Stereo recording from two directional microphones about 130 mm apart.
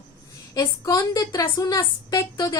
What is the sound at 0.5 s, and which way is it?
A woman's voice, 25° left (ahead or behind).